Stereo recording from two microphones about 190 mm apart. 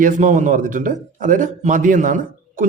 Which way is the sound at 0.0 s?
40° right (ahead or behind).